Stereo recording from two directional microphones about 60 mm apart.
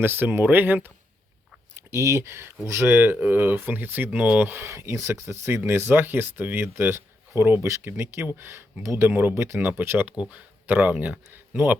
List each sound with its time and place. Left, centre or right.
0.0 s speech: right
1.7 s speech: right
4.7 s speech: right
9.3 s speech: right
10.1 s speech: right